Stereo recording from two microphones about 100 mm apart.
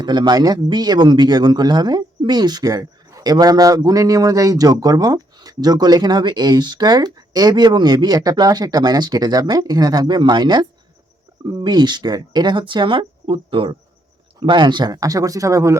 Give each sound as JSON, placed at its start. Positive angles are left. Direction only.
{"t": 0.0, "sound": "speech", "side_deg": -45}